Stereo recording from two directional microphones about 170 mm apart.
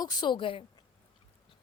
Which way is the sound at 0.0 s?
25° left (ahead or behind).